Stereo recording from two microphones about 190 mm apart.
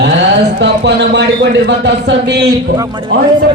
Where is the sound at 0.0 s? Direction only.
65° right (ahead or behind).